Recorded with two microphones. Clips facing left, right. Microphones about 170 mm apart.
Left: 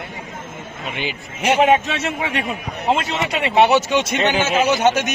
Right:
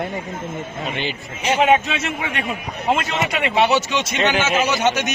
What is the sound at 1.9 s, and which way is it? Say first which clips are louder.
Speech: left 2 dB; 35° left (ahead or behind).